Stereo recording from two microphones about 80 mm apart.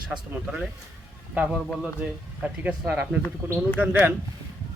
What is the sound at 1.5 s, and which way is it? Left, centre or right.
A man's voice, centre.